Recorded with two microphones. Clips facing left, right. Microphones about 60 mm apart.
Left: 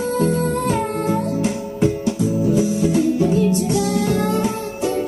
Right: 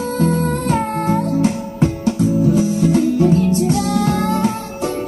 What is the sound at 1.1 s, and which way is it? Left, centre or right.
Music, right.